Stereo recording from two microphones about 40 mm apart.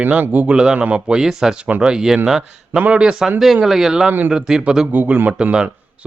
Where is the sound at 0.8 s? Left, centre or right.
Right.